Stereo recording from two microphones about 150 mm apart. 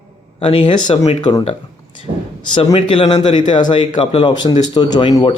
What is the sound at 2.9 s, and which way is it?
A man's voice, 35° left (ahead or behind).